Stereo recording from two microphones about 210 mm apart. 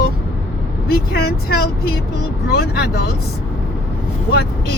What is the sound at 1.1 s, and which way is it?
Speech, 50° left (ahead or behind).